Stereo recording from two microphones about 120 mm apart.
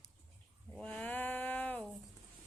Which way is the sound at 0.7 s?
10° left (ahead or behind).